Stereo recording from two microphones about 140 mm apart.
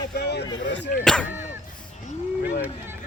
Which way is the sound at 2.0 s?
60° left (ahead or behind).